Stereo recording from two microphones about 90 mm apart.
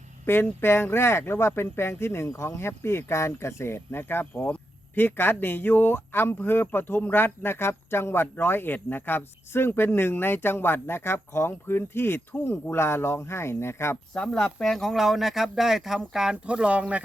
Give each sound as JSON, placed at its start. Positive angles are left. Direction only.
{"t": 0.3, "sound": "speech", "side_deg": 25}
{"t": 13.9, "sound": "speech", "side_deg": 10}